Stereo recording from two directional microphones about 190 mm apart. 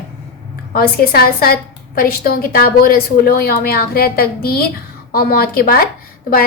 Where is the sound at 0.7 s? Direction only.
50° left (ahead or behind).